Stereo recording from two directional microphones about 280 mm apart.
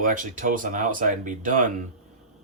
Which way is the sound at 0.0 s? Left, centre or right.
Right.